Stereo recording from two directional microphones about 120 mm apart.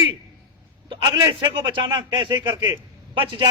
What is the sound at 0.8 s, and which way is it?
Speech, 40° right (ahead or behind).